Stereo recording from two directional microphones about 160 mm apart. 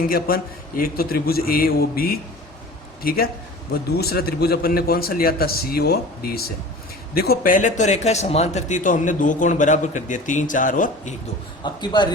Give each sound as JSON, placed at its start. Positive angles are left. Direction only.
{"t": 0.1, "sound": "a man's voice", "side_deg": 70}
{"t": 11.6, "sound": "a man's voice", "side_deg": 25}